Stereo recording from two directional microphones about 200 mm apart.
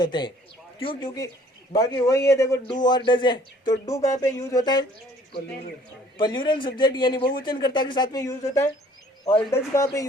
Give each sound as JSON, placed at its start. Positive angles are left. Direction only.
{"t": 0.0, "sound": "a man's voice", "side_deg": 20}
{"t": 6.1, "sound": "a man's voice", "side_deg": 25}